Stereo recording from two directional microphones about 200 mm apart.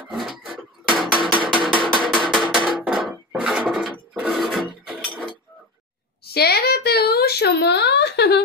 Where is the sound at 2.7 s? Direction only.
5° right (ahead or behind).